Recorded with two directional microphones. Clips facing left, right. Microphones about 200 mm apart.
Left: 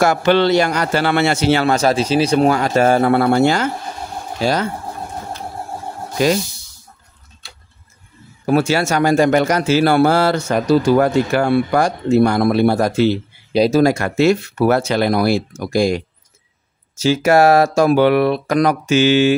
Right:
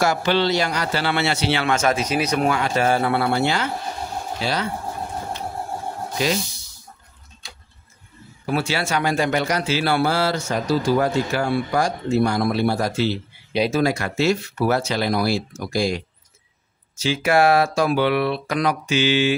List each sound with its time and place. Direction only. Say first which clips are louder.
0.0 s a man's voice: left 6 dB; 55° left (ahead or behind)
8.5 s a man's voice: left 8 dB; 45° left (ahead or behind)
13.5 s speech: left 7 dB; 40° left (ahead or behind)
17.0 s a man's voice: left 5 dB; 40° left (ahead or behind)